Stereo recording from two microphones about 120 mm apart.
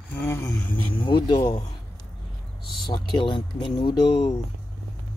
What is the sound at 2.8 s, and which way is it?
Speech, 40° left (ahead or behind).